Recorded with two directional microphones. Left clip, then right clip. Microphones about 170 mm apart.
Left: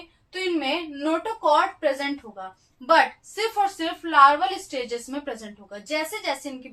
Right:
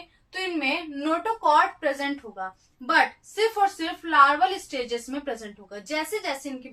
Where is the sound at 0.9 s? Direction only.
30° right (ahead or behind).